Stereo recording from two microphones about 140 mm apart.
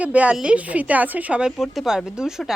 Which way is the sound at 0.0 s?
10° right (ahead or behind).